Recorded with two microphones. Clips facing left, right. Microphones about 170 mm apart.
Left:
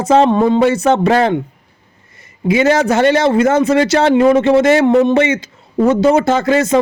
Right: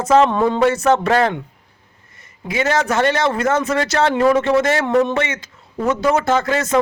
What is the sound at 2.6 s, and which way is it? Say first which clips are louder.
Speech: left 4 dB; 35° left (ahead or behind).